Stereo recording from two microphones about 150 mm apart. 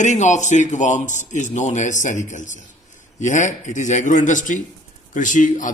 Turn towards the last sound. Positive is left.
turn(degrees=60)  # may be behind; listen again after turning